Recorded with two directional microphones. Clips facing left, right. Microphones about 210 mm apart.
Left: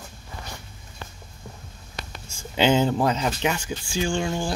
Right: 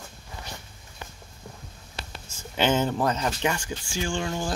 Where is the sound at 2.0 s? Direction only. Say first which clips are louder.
Left 2 dB; 25° right (ahead or behind).